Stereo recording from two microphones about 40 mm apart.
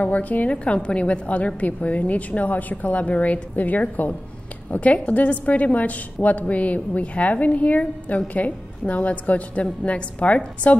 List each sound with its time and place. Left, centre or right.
0.0 s a woman's voice: left
0.7 s a woman's voice: left
4.7 s a woman's voice: left